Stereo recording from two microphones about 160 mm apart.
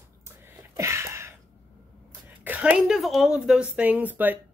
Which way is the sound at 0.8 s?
15° right (ahead or behind).